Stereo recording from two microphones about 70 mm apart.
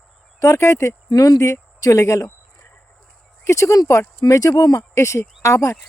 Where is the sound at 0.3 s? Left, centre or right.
Left.